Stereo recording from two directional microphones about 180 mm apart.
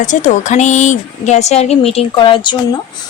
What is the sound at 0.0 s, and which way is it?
A woman's voice, 45° left (ahead or behind).